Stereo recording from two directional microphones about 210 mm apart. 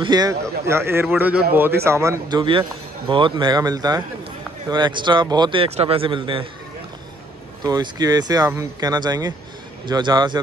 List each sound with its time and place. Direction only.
0.0 s speech: 20° right (ahead or behind)
7.6 s speech: 20° right (ahead or behind)